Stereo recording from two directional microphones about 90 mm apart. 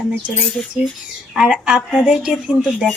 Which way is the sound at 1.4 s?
10° right (ahead or behind).